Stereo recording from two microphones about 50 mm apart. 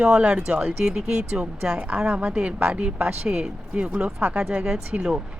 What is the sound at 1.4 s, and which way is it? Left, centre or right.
Speech, right.